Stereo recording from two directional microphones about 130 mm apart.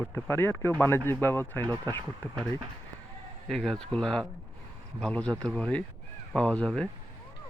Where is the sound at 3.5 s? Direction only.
5° left (ahead or behind).